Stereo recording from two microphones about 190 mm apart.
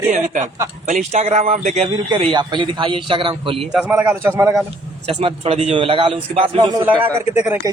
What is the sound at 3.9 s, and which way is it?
Speech, 10° right (ahead or behind).